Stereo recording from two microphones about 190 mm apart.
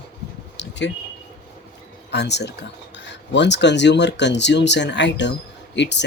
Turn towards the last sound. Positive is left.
turn(degrees=65)  # may be behind; listen again after turning